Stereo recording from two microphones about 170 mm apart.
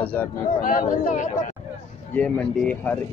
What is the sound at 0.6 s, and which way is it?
Speech, 55° left (ahead or behind).